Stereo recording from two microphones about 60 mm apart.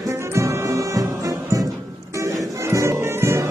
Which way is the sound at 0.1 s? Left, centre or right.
Right.